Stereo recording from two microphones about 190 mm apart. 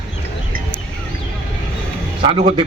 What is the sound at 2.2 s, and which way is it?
Speech, 30° right (ahead or behind).